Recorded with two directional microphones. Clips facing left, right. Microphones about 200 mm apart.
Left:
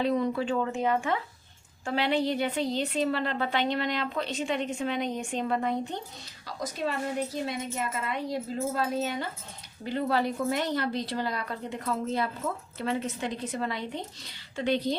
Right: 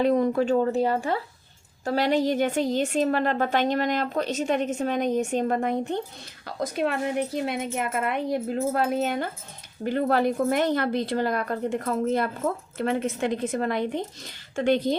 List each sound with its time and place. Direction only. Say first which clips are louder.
0.0 s a woman's voice: right 5 dB; 45° right (ahead or behind)